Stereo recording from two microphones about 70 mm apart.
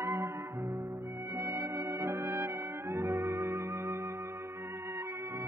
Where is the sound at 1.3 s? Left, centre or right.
Right.